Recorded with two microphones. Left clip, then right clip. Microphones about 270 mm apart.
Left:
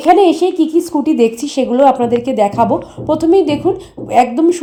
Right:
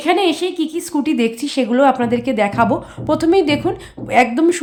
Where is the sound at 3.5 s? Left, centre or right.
Right.